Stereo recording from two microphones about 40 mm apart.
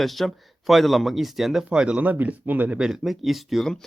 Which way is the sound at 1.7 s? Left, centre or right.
Right.